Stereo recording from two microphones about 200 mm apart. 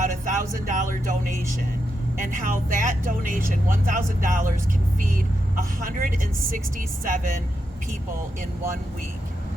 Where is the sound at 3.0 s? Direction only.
40° right (ahead or behind).